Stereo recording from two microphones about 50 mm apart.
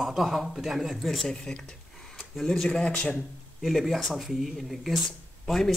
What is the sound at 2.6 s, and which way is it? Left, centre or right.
Speech, centre.